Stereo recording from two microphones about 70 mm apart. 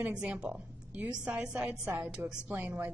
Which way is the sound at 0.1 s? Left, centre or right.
Centre.